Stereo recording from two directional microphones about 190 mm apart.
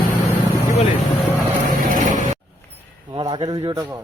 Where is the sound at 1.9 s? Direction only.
45° right (ahead or behind).